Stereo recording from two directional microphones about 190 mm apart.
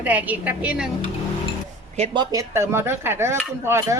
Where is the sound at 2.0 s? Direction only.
35° right (ahead or behind).